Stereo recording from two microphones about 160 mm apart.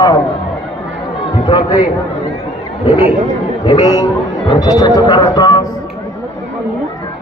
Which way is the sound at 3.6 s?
30° left (ahead or behind).